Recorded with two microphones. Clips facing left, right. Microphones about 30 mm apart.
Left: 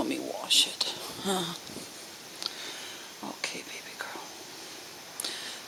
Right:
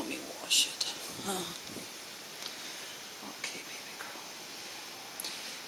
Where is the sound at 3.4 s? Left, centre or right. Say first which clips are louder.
Left 5 dB; left.